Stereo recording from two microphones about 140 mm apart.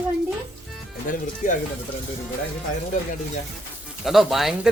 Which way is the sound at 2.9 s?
60° left (ahead or behind).